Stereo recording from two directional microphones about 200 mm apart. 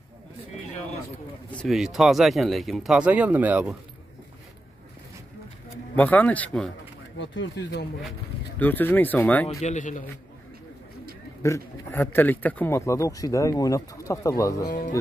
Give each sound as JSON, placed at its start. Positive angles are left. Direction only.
{"t": 1.5, "sound": "speech", "side_deg": 0}
{"t": 5.9, "sound": "a man's voice", "side_deg": 10}
{"t": 7.2, "sound": "speech", "side_deg": 65}
{"t": 8.5, "sound": "a man's voice", "side_deg": 10}
{"t": 9.6, "sound": "a man's voice", "side_deg": 35}
{"t": 11.4, "sound": "a man's voice", "side_deg": 15}